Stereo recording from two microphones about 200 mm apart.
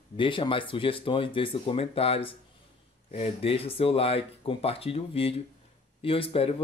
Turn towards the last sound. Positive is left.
turn(degrees=30)  # may be behind; listen again after turning